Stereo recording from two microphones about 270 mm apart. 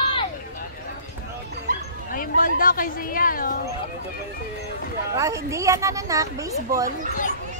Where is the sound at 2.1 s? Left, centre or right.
Left.